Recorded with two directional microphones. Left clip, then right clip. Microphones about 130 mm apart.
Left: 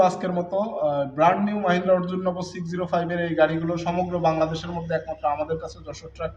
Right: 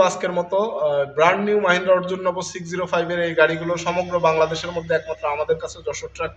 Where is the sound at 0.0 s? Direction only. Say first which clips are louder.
Right 2 dB; 20° right (ahead or behind).